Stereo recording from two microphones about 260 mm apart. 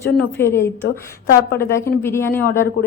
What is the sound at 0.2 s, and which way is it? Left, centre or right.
A woman's voice, centre.